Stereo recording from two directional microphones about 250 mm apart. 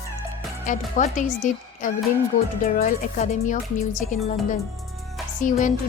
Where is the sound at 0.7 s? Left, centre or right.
Left.